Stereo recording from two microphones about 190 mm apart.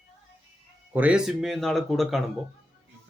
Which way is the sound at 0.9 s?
10° right (ahead or behind).